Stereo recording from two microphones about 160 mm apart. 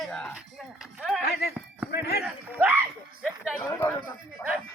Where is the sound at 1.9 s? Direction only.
90° left.